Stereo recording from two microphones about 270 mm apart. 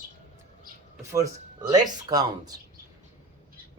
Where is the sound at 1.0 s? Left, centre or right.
Centre.